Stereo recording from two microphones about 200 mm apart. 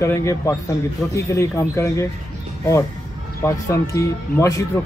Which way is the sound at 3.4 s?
15° left (ahead or behind).